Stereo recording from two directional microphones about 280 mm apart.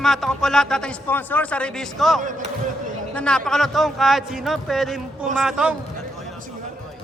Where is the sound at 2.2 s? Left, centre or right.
Right.